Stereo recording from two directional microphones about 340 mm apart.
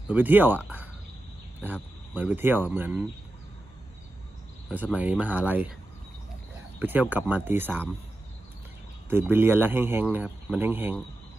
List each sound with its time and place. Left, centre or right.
0.1 s speech: centre
4.7 s speech: centre
6.7 s speech: centre
9.0 s speech: centre